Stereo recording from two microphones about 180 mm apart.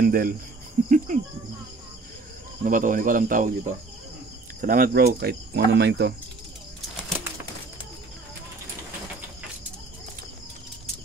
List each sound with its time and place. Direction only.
0.0 s speech: 50° right (ahead or behind)
0.8 s cricket: 45° right (ahead or behind)
2.6 s speech: 45° right (ahead or behind)
4.6 s speech: 50° right (ahead or behind); by 6.1 s 65° right (ahead or behind)